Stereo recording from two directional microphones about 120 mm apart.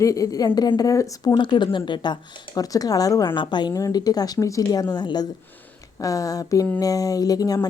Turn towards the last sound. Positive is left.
turn(degrees=30)  # may be behind; listen again after turning